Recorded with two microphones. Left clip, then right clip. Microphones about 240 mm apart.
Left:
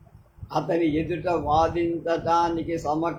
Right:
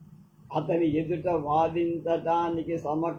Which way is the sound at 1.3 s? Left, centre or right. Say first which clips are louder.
Left 4 dB; left.